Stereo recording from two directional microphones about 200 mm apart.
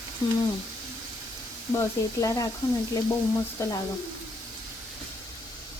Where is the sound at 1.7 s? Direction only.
15° left (ahead or behind).